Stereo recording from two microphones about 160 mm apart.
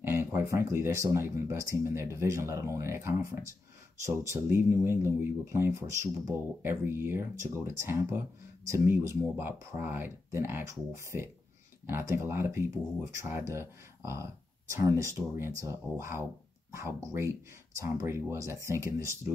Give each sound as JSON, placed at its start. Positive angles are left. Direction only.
{"t": 0.0, "sound": "speech", "side_deg": -15}